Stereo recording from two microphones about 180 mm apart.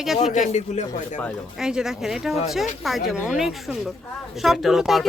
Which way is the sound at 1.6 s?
5° right (ahead or behind).